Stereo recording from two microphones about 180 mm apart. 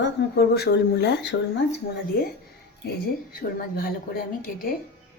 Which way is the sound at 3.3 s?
55° left (ahead or behind).